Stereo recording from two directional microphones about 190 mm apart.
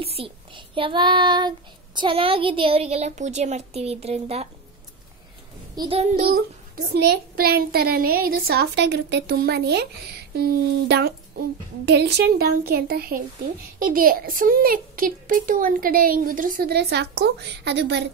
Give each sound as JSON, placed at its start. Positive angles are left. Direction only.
{"t": 0.0, "sound": "child singing", "side_deg": -30}
{"t": 2.0, "sound": "a woman's voice", "side_deg": -25}
{"t": 5.8, "sound": "child singing", "side_deg": -30}
{"t": 6.9, "sound": "a woman's voice", "side_deg": -60}